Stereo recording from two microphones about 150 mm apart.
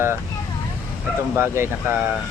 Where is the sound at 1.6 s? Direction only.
15° right (ahead or behind).